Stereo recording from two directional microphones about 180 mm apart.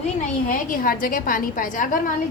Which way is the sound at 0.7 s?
50° left (ahead or behind).